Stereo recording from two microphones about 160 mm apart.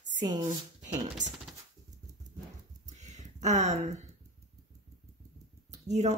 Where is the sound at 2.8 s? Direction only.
45° right (ahead or behind).